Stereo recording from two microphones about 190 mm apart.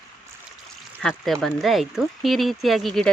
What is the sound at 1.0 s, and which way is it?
Speech, centre (ahead or behind).